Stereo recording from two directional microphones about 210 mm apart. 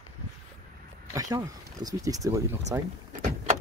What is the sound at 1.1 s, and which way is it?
Speech, 15° right (ahead or behind).